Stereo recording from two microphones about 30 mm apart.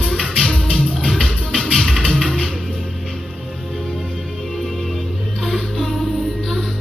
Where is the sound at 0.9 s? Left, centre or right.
Centre.